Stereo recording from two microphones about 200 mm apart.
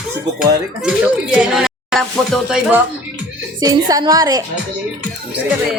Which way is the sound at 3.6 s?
20° right (ahead or behind).